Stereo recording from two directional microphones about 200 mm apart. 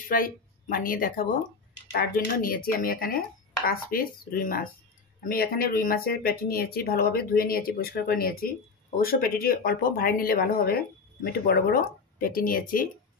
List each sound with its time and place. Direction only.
0.1 s speech: 45° left (ahead or behind)